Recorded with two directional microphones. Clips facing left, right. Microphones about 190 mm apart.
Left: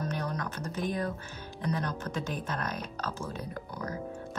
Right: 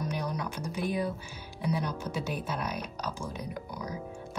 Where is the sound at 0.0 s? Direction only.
10° right (ahead or behind).